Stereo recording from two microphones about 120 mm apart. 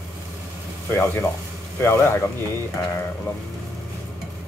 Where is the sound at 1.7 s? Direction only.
20° left (ahead or behind).